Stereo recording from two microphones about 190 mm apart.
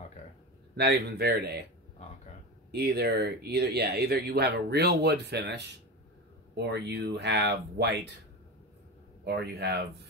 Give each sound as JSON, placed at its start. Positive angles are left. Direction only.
{"t": 0.7, "sound": "speech", "side_deg": -60}
{"t": 2.7, "sound": "speech", "side_deg": -60}
{"t": 9.2, "sound": "speech", "side_deg": -60}